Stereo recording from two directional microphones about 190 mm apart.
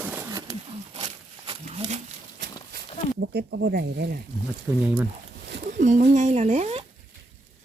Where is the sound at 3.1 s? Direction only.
65° right (ahead or behind).